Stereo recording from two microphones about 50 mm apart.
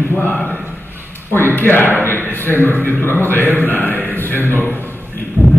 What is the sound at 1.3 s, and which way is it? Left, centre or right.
Speech, left.